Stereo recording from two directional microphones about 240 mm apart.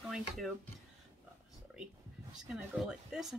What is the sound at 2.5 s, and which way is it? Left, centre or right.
Speech, centre.